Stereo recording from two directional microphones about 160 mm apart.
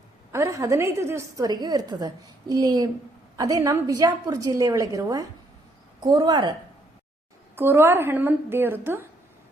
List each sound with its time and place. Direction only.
0.3 s a woman's voice: 20° right (ahead or behind)
7.5 s speech: 15° right (ahead or behind)